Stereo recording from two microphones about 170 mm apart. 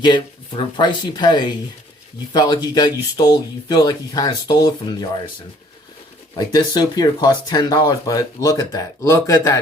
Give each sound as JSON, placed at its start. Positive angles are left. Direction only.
{"t": 0.0, "sound": "speech", "side_deg": 25}
{"t": 6.3, "sound": "speech", "side_deg": 25}